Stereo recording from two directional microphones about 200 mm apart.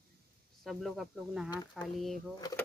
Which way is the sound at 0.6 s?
Centre (ahead or behind).